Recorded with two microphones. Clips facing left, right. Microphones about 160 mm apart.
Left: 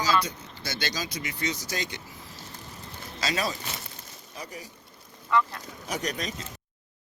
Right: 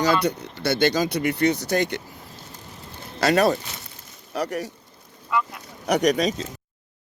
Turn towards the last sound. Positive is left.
turn(degrees=-75)  # may be behind; listen again after turning